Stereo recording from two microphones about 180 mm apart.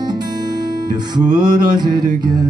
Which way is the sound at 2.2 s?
25° right (ahead or behind).